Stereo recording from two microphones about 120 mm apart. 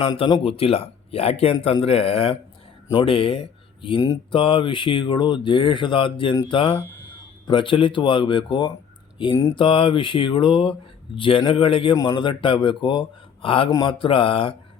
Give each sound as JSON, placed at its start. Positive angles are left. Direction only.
{"t": 0.4, "sound": "speech", "side_deg": 55}
{"t": 13.7, "sound": "speech", "side_deg": 30}
{"t": 14.0, "sound": "speech", "side_deg": 45}